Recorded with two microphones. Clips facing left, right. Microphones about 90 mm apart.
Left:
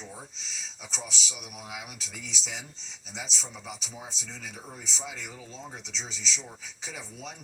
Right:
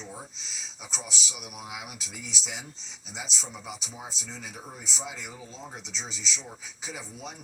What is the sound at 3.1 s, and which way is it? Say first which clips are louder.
Speech: right 1 dB; 15° right (ahead or behind).